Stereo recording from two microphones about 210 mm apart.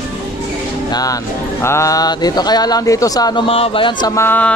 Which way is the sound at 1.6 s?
15° left (ahead or behind).